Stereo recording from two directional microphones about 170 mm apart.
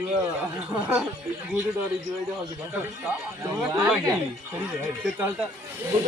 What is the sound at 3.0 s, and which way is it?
Speech, 10° right (ahead or behind).